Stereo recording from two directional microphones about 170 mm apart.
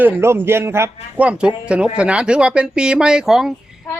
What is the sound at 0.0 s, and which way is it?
A woman's voice, 15° right (ahead or behind).